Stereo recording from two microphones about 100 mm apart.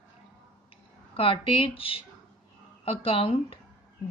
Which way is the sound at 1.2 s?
65° left (ahead or behind).